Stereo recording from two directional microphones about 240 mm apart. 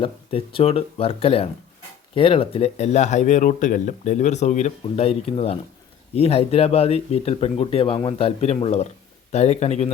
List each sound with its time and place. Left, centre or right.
0.0 s speech: left